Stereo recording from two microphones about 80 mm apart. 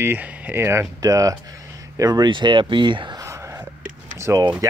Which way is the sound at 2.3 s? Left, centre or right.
Right.